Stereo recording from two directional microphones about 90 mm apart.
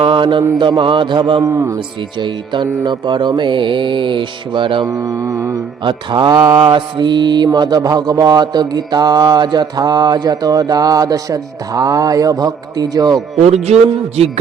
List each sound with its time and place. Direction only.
0.0 s mantra: 80° right
0.6 s speech: 65° right (ahead or behind)
1.4 s mantra: 40° right (ahead or behind)
2.1 s speech: 60° right (ahead or behind)
4.9 s mantra: 40° right (ahead or behind)
5.8 s mantra: 60° right (ahead or behind)